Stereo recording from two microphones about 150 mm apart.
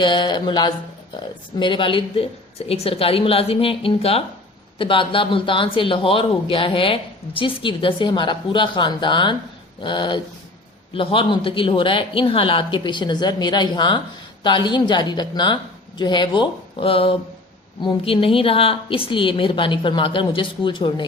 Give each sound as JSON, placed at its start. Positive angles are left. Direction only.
{"t": 0.0, "sound": "speech", "side_deg": 30}